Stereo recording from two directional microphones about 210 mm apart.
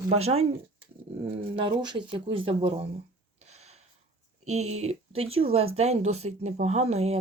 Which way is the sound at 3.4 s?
30° right (ahead or behind).